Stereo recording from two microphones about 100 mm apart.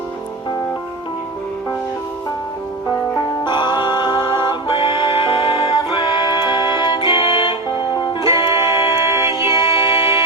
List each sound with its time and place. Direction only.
3.4 s music: 50° left (ahead or behind)